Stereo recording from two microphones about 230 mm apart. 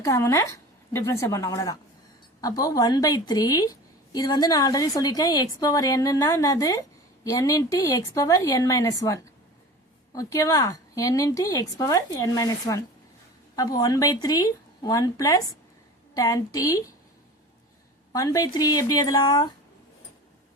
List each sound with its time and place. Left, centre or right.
0.0 s a woman's voice: centre
18.1 s a woman's voice: centre